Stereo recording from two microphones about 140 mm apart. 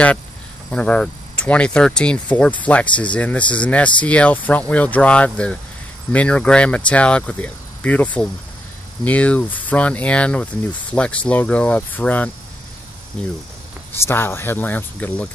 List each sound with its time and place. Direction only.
0.7 s speech: 10° left (ahead or behind)
13.9 s speech: 15° left (ahead or behind)